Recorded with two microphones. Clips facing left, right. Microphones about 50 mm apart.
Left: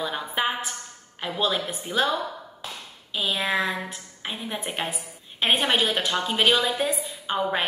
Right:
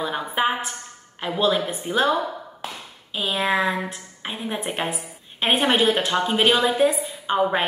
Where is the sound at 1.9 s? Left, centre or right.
Centre.